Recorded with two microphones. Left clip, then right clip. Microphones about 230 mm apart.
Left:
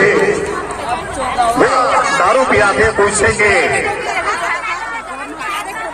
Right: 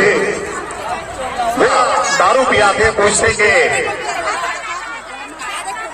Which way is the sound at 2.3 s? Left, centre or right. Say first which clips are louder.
Left 1 dB; right.